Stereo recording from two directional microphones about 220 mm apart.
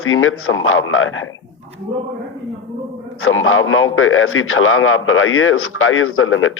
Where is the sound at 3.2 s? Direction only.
65° left (ahead or behind).